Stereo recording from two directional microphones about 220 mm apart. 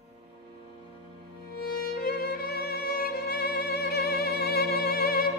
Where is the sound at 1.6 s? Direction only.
45° left (ahead or behind).